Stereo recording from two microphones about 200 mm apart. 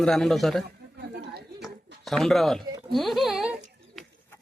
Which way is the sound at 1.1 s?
55° right (ahead or behind).